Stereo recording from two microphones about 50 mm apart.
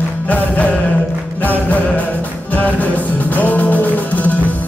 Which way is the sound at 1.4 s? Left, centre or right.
Left.